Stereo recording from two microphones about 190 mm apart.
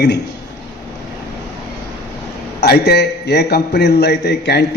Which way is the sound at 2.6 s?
60° left (ahead or behind).